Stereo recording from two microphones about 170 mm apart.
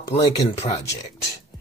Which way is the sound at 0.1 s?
35° left (ahead or behind).